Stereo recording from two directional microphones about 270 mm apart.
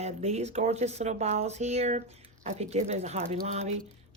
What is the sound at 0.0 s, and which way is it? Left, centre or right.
Speech, right.